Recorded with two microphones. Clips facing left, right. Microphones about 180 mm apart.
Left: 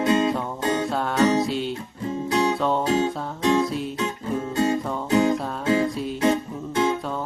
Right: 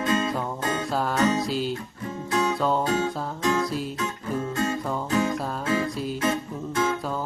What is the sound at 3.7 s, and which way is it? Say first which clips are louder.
Music: left 2 dB; centre (ahead or behind).